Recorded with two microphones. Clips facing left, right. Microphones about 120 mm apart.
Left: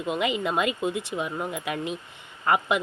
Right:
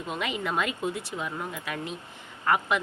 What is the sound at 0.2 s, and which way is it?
A woman's voice, 20° left (ahead or behind).